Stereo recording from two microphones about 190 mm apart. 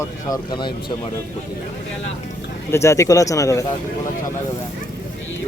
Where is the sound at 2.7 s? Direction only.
15° left (ahead or behind).